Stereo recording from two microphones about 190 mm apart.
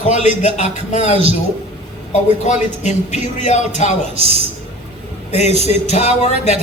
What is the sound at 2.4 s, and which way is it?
Music, 35° left (ahead or behind).